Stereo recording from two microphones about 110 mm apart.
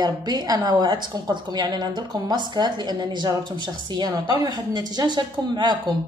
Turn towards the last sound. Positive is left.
turn(degrees=-40)  # may be behind; listen again after turning